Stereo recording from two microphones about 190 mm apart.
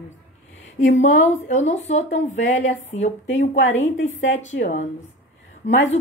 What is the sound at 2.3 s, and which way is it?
Speech, 75° left (ahead or behind).